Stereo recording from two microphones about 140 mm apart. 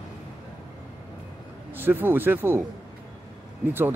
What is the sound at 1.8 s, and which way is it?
Speech, 15° right (ahead or behind).